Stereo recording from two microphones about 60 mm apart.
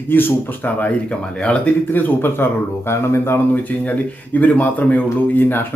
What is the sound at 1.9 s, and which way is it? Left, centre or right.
Speech, left.